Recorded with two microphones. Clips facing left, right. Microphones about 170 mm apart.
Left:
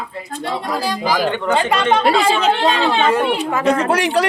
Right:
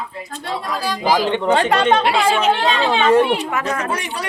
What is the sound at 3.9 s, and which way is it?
Speech, 75° left (ahead or behind).